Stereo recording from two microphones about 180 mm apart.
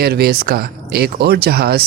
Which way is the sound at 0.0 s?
60° right (ahead or behind).